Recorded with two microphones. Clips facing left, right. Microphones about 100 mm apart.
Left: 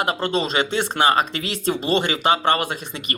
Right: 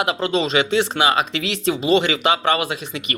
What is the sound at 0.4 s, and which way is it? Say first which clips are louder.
Speech: right 3 dB; 45° left (ahead or behind).